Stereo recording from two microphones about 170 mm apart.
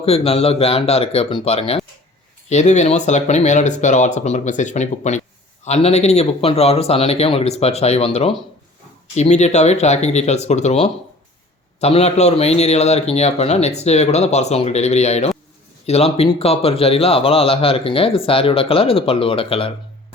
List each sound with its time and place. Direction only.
0.0 s a man's voice: 35° left (ahead or behind)